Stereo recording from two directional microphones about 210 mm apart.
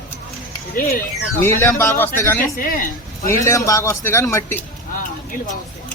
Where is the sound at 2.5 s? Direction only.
45° left (ahead or behind).